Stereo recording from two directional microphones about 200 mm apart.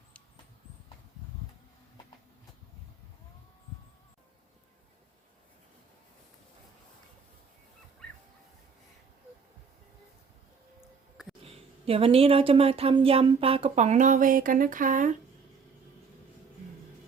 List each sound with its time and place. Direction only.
11.9 s speech: 25° right (ahead or behind)